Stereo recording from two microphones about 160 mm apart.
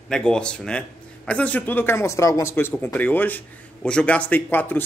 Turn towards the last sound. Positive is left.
turn(degrees=10)  # may be behind; listen again after turning